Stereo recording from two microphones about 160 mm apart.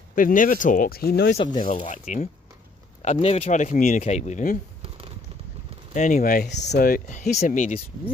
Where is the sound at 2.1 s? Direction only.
50° left (ahead or behind).